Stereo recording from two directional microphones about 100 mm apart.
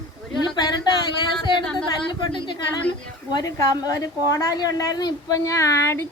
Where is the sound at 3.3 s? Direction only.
40° left (ahead or behind).